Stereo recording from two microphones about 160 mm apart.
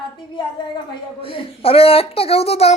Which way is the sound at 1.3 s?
35° left (ahead or behind).